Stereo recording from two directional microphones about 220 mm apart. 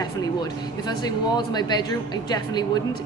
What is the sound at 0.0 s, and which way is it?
Speech, 15° left (ahead or behind).